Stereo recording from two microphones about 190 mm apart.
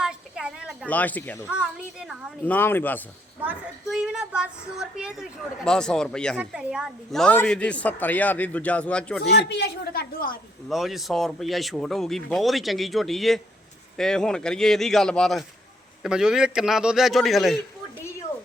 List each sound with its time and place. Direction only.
0.0 s a sound: 5° right (ahead or behind)
0.9 s a woman's voice: 10° left (ahead or behind)
1.5 s speech: 5° right (ahead or behind)
2.4 s a woman's voice: 10° left (ahead or behind)
3.4 s a woman's voice: 5° right (ahead or behind)
9.3 s a woman's voice: 60° left (ahead or behind)
10.7 s speech: centre (ahead or behind)